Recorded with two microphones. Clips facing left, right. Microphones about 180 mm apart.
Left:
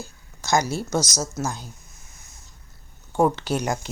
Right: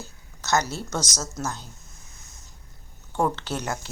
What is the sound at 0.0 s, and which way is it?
A woman's voice, 10° left (ahead or behind).